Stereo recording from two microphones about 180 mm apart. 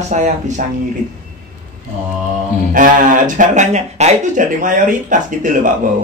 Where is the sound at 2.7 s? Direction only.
50° right (ahead or behind).